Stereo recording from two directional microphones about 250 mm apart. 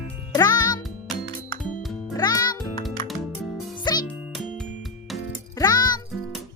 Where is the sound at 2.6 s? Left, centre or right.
Centre.